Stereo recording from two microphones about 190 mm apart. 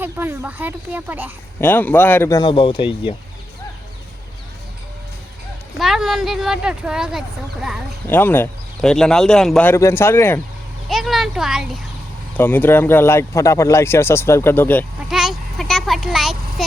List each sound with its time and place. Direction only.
0.0 s speech: 10° right (ahead or behind)
1.6 s speech: 10° left (ahead or behind); by 3.2 s 25° left (ahead or behind)
5.8 s speech: centre (ahead or behind)
8.0 s speech: 10° left (ahead or behind)
10.8 s speech: centre (ahead or behind)
12.4 s speech: 10° left (ahead or behind)
15.1 s a sound: centre (ahead or behind)